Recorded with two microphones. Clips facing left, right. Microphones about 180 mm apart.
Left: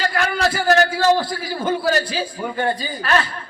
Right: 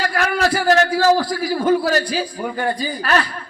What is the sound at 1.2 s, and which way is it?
A man's voice, 25° left (ahead or behind).